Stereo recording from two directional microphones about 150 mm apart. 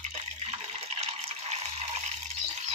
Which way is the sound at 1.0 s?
45° right (ahead or behind).